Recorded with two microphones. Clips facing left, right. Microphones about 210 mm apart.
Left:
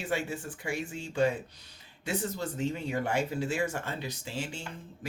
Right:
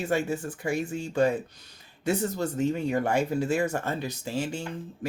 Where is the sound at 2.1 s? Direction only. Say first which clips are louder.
Right 6 dB; 45° right (ahead or behind).